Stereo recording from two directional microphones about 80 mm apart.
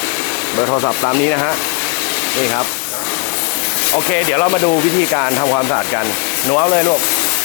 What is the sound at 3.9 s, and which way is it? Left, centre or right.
Speech, centre.